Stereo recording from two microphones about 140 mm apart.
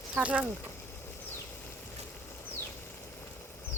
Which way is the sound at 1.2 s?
15° left (ahead or behind).